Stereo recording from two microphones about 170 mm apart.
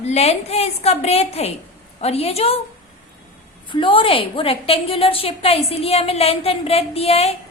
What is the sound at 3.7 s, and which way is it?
A woman's voice, 30° left (ahead or behind).